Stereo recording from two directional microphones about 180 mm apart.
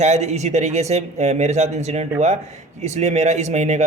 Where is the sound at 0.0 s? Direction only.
40° right (ahead or behind).